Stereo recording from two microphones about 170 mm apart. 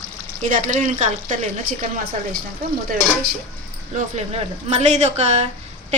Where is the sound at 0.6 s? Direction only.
50° right (ahead or behind).